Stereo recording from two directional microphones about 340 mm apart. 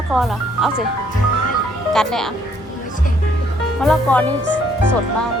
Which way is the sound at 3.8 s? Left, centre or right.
Centre.